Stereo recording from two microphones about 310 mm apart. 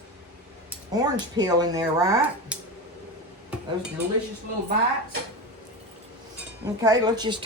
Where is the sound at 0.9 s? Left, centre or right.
Centre.